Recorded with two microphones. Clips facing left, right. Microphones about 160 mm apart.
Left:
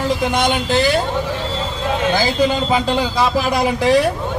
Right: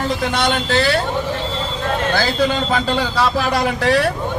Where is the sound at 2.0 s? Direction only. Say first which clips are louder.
Left 2 dB; 10° left (ahead or behind).